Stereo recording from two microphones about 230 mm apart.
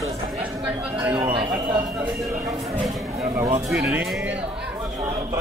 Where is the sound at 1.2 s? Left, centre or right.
Right.